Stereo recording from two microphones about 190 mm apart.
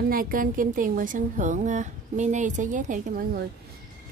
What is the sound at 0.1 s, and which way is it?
A woman's voice, 50° right (ahead or behind).